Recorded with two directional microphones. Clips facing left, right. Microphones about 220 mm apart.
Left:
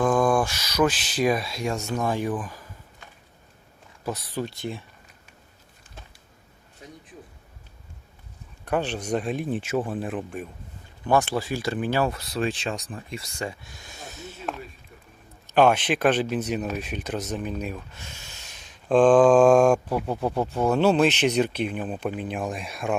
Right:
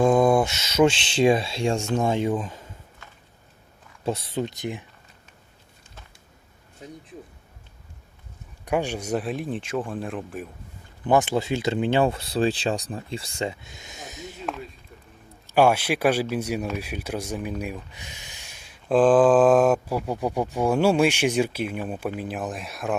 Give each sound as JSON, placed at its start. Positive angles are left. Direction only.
{"t": 0.0, "sound": "speech", "side_deg": -25}
{"t": 4.0, "sound": "speech", "side_deg": -25}
{"t": 8.6, "sound": "speech", "side_deg": -10}
{"t": 11.0, "sound": "speech", "side_deg": -20}
{"t": 15.5, "sound": "speech", "side_deg": -10}